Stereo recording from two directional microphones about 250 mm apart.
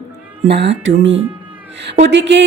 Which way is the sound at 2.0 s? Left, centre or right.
Right.